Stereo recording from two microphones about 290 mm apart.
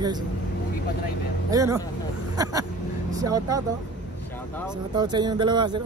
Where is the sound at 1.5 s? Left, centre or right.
Centre.